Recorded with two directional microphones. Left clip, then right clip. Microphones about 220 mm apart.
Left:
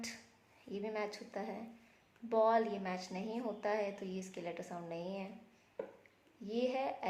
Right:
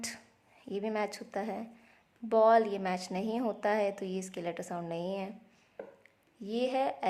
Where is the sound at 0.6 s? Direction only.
45° right (ahead or behind).